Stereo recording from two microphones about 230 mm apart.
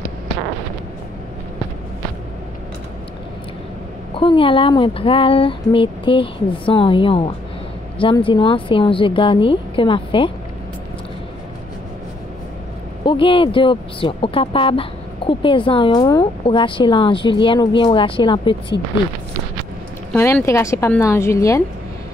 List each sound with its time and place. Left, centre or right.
4.1 s speech: left
13.0 s speech: left
20.1 s speech: centre